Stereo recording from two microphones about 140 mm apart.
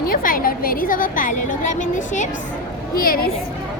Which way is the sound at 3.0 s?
90° left.